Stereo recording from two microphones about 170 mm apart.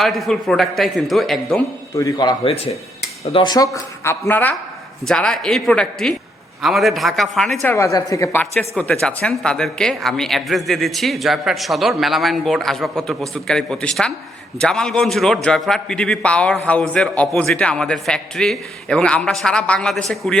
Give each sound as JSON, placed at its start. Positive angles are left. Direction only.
{"t": 0.0, "sound": "speech", "side_deg": 0}
{"t": 2.0, "sound": "speech", "side_deg": 25}
{"t": 7.8, "sound": "speech", "side_deg": 20}